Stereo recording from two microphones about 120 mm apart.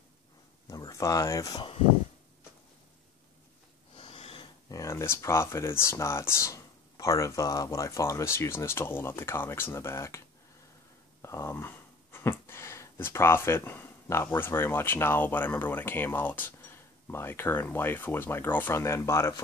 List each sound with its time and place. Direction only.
0.7 s speech: 30° left (ahead or behind)
3.9 s snort: 50° left (ahead or behind)
4.6 s speech: 25° left (ahead or behind)
11.2 s speech: 20° left (ahead or behind)